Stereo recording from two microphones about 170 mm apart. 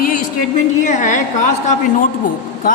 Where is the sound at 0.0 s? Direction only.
50° left (ahead or behind).